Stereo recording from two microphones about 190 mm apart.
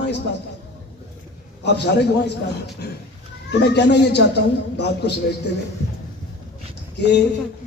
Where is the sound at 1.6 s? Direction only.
60° left (ahead or behind).